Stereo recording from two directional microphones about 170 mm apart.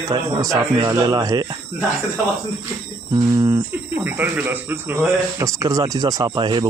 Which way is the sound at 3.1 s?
25° right (ahead or behind).